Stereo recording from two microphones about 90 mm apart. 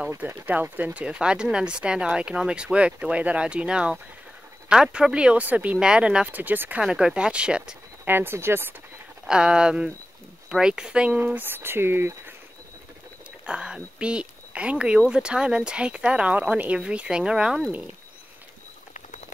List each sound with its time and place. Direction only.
0.2 s speech: 20° right (ahead or behind)
6.8 s speech: 10° right (ahead or behind)
8.0 s speech: 25° right (ahead or behind)
9.2 s speech: 10° right (ahead or behind); by 12.4 s 25° right (ahead or behind)
13.5 s speech: 10° right (ahead or behind)